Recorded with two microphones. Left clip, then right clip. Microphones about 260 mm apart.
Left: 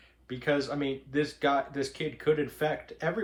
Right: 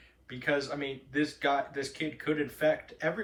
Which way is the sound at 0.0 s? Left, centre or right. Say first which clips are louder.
Left 1 dB; centre.